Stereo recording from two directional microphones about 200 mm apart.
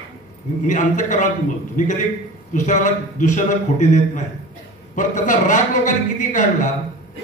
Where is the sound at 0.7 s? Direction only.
40° left (ahead or behind).